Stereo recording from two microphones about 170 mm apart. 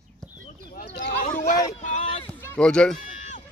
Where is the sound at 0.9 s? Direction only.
60° left (ahead or behind).